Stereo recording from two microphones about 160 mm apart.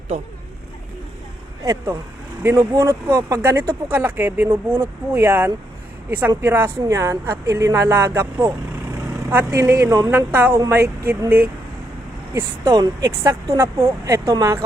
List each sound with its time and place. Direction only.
1.6 s a woman's voice: 20° right (ahead or behind)